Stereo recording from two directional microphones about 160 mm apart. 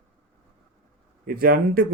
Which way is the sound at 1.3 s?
65° right (ahead or behind).